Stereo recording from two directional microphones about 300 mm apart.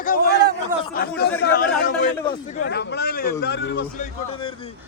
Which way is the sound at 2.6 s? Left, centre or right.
Left.